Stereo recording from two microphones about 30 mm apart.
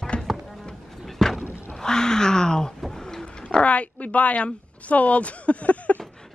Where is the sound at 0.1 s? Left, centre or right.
Left.